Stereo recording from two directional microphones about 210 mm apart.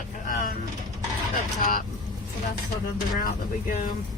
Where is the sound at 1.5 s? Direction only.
40° left (ahead or behind).